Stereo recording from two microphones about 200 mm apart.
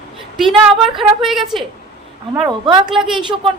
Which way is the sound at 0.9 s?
Centre (ahead or behind).